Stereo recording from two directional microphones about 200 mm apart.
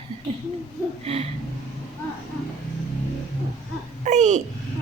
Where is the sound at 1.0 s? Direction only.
30° right (ahead or behind).